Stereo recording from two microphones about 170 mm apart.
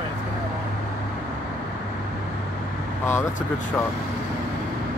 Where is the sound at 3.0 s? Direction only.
15° left (ahead or behind).